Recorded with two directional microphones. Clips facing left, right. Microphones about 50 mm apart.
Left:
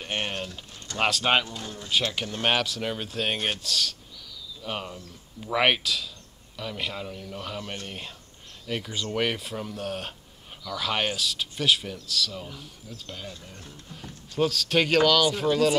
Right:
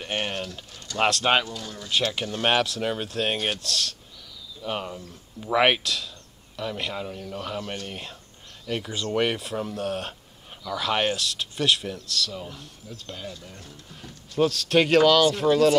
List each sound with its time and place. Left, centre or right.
0.0 s a sound: centre
0.9 s speech: centre
1.5 s speech: left
2.4 s speech: centre